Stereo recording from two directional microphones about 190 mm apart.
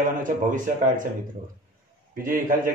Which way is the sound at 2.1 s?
45° right (ahead or behind).